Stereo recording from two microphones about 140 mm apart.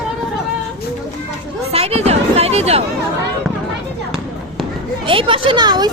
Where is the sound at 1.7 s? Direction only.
45° right (ahead or behind).